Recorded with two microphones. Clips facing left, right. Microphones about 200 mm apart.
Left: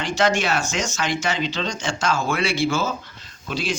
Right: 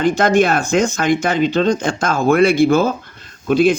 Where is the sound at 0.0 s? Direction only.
55° right (ahead or behind).